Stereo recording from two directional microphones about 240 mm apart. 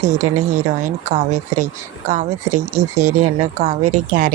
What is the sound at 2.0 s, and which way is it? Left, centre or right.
Speech, right.